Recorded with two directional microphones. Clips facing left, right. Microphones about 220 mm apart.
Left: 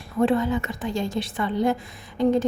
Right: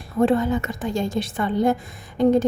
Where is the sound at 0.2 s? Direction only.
45° right (ahead or behind).